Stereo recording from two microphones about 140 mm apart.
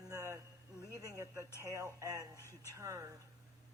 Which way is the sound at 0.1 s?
20° right (ahead or behind).